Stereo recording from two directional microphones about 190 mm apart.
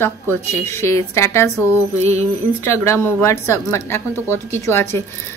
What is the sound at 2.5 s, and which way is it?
Speech, 15° left (ahead or behind).